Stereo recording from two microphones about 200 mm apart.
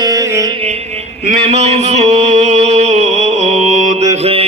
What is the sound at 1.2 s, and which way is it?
Mantra, 35° right (ahead or behind).